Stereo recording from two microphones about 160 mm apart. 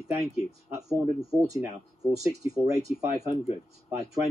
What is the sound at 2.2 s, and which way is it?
Speech, 20° right (ahead or behind).